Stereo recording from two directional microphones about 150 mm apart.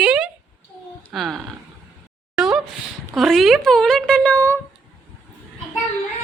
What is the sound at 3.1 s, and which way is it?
Speech, centre (ahead or behind).